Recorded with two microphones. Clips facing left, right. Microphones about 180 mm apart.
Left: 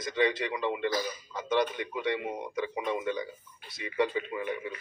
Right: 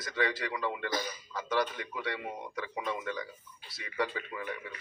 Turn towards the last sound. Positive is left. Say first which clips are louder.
# left 6 dB
turn(degrees=20)  # may be behind; listen again after turning